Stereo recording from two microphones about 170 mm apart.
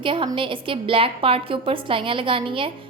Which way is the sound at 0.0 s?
30° right (ahead or behind).